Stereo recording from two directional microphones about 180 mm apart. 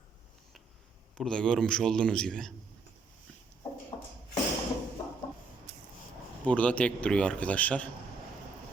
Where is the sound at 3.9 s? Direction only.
25° left (ahead or behind).